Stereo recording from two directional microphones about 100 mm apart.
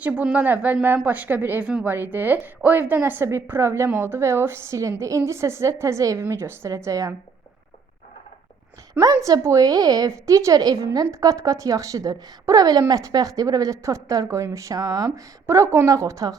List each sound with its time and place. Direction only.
0.0 s a woman's voice: 15° right (ahead or behind); by 7.1 s 30° right (ahead or behind)
9.0 s speech: 40° right (ahead or behind)